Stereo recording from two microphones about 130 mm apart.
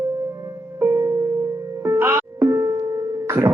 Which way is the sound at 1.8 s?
20° right (ahead or behind).